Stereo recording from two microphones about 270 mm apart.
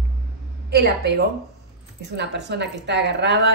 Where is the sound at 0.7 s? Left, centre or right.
Right.